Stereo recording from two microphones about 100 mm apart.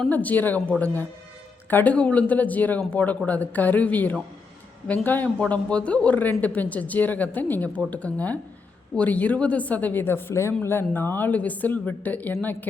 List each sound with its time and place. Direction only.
0.1 s speech: 15° left (ahead or behind)
1.7 s speech: 15° left (ahead or behind)